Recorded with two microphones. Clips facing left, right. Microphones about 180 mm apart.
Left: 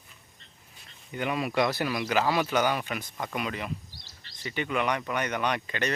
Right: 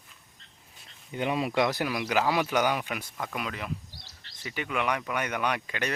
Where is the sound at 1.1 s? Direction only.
25° right (ahead or behind).